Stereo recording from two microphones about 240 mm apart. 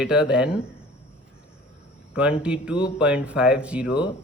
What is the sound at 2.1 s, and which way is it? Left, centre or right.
Speech, centre.